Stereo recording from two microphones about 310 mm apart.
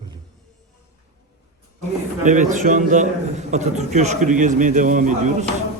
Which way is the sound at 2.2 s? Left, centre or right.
Right.